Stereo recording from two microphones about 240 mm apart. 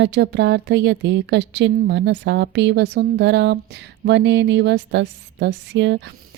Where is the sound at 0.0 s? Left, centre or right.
Right.